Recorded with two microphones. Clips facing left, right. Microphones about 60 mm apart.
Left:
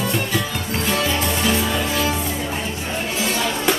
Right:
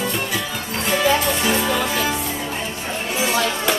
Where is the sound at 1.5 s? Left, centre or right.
Right.